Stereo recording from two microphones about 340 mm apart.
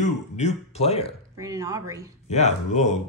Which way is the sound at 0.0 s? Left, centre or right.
Centre.